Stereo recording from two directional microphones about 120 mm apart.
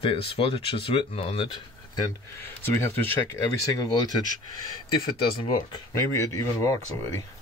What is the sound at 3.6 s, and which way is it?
Speech, 30° left (ahead or behind).